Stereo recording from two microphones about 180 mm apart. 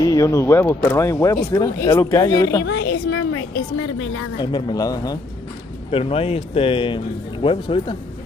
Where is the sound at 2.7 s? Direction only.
70° left (ahead or behind).